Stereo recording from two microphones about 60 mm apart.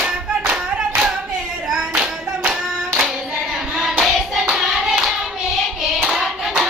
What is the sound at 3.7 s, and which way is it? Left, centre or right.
Hands, centre.